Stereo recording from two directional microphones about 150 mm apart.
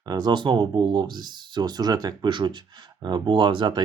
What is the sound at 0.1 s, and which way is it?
Speech, 30° right (ahead or behind).